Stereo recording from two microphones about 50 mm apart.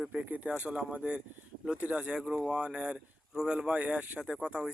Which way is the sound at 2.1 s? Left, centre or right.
Centre.